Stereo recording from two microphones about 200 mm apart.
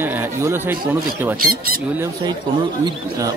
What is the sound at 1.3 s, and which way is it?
Speech, 45° right (ahead or behind).